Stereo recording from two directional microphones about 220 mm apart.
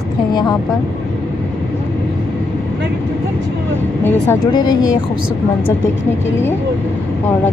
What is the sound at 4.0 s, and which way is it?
Speech, 10° left (ahead or behind).